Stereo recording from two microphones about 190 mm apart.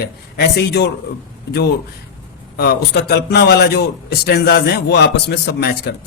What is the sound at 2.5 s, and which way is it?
A man's voice, 55° left (ahead or behind).